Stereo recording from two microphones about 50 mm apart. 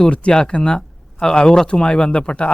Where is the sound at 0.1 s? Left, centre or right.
Left.